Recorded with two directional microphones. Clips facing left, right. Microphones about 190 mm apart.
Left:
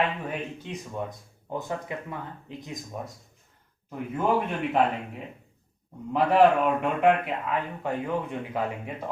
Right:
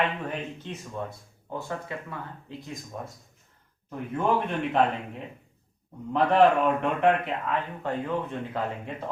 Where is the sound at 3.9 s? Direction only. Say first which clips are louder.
Even; 5° left (ahead or behind).